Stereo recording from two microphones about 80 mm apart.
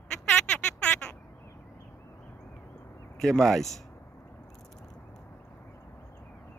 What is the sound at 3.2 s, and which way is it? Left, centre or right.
Speech, centre.